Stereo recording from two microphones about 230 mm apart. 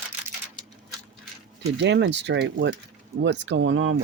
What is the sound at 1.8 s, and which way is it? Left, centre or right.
Speech, right.